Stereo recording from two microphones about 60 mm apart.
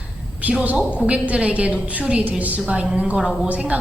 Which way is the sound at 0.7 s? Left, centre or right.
Centre.